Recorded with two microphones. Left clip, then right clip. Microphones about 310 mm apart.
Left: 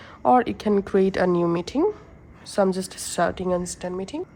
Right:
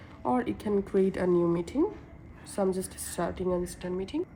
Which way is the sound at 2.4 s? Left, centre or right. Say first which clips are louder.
Left 7 dB; left.